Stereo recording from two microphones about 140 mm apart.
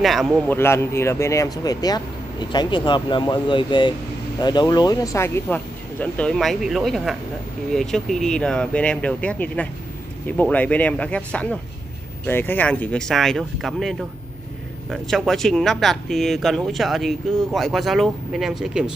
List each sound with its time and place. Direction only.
0.0 s speech: centre (ahead or behind)
0.5 s speech: 15° left (ahead or behind); by 18.9 s 5° right (ahead or behind)